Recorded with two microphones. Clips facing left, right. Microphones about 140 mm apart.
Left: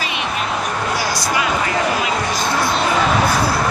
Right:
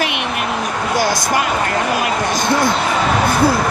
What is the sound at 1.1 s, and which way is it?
Speech, 50° right (ahead or behind).